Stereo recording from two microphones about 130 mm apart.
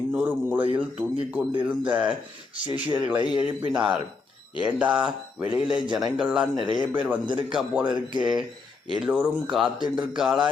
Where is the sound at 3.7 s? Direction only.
10° right (ahead or behind).